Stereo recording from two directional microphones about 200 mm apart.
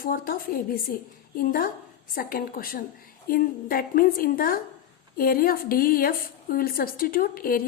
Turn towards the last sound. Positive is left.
turn(degrees=45)  # may be behind; listen again after turning